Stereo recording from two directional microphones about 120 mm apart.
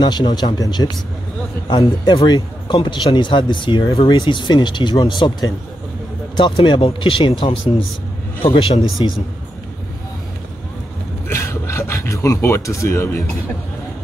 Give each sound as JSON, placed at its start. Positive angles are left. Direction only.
{"t": 0.0, "sound": "speech", "side_deg": 35}
{"t": 4.2, "sound": "speech", "side_deg": 40}
{"t": 11.2, "sound": "a sound", "side_deg": 20}